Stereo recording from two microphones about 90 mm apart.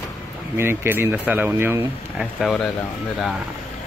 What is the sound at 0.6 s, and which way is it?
Speech, 25° right (ahead or behind).